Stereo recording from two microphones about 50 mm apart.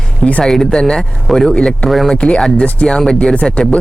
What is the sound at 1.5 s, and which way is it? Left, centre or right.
Speech, left.